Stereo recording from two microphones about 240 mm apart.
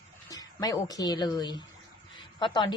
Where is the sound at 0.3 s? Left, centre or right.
Centre.